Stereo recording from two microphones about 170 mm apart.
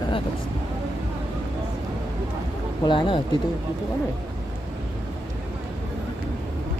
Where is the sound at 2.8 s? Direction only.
30° left (ahead or behind).